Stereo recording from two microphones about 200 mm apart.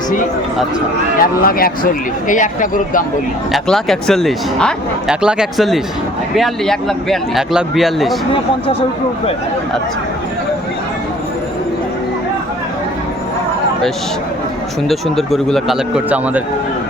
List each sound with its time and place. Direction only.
1.2 s speech: 45° left (ahead or behind)
3.5 s speech: centre (ahead or behind)
14.8 s speech: centre (ahead or behind)